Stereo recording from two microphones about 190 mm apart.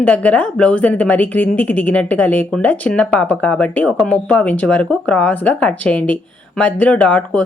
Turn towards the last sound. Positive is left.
turn(degrees=5)  # may be behind; listen again after turning